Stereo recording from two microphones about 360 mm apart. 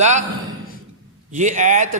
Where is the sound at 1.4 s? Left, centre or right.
Centre.